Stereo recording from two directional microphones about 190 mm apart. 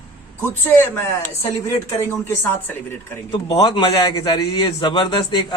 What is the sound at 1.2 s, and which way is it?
Speech, 30° left (ahead or behind).